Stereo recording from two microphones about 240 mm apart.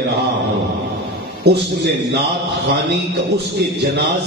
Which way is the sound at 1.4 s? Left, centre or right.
Right.